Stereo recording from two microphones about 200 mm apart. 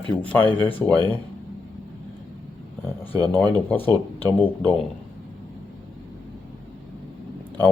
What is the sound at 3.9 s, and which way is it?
Speech, 10° left (ahead or behind).